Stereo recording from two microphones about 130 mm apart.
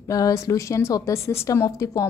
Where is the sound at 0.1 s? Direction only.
25° left (ahead or behind).